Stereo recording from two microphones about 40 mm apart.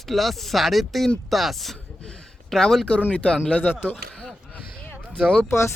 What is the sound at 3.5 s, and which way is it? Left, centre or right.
Speech, left.